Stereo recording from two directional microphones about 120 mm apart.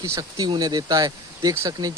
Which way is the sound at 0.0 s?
25° right (ahead or behind).